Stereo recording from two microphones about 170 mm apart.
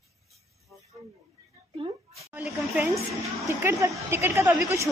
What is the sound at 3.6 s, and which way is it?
Speech, 20° right (ahead or behind).